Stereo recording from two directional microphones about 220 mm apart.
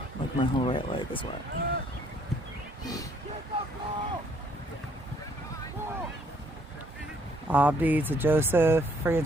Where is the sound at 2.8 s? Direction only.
15° left (ahead or behind).